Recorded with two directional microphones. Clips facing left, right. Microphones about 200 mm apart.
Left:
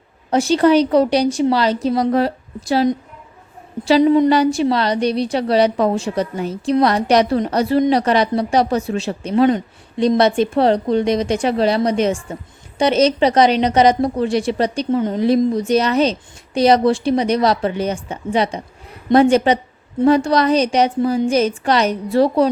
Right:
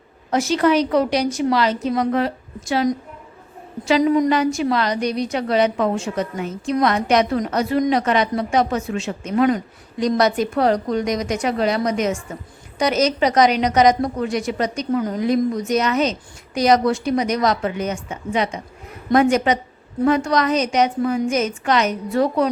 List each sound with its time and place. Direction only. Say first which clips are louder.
0.3 s a woman's voice: left 4 dB; 30° left (ahead or behind)